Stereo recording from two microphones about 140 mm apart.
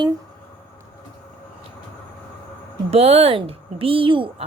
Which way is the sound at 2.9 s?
45° right (ahead or behind).